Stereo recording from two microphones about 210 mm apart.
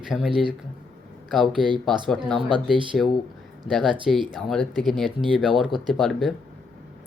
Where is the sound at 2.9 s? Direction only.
Centre (ahead or behind).